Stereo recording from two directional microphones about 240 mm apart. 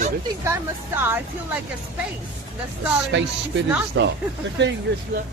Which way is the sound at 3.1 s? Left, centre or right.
Right.